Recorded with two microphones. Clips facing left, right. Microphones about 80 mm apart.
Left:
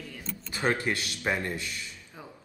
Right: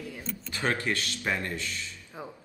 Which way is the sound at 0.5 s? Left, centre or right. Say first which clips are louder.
Left 1 dB; centre.